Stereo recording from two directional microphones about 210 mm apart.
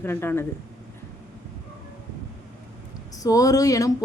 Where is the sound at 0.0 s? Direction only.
10° left (ahead or behind).